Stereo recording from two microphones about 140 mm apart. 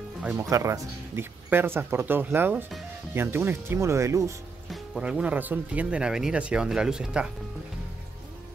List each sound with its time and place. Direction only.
0.4 s speech: 20° right (ahead or behind)
4.6 s speech: centre (ahead or behind)